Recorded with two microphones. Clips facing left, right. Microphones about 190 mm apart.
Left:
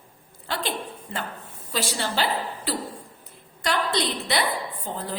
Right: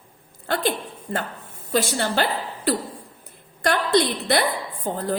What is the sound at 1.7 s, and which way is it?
A woman's voice, 50° right (ahead or behind).